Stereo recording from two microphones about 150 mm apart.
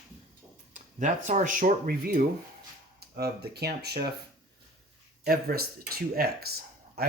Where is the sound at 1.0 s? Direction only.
55° right (ahead or behind); by 2.2 s 75° right (ahead or behind).